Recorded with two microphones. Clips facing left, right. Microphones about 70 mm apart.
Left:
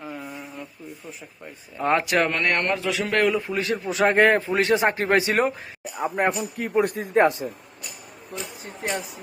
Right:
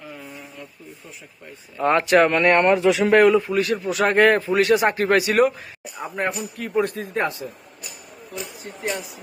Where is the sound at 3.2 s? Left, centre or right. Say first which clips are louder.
Right 5 dB; centre.